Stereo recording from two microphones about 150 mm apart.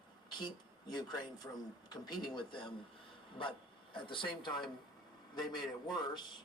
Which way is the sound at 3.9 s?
35° left (ahead or behind).